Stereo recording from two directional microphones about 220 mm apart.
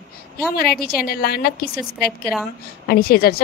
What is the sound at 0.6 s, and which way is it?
A woman's voice, 45° left (ahead or behind).